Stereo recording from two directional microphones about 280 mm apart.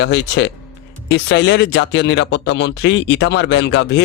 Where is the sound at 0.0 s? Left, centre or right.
Left.